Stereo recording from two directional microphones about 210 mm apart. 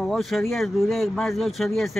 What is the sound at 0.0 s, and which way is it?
Speech, centre (ahead or behind).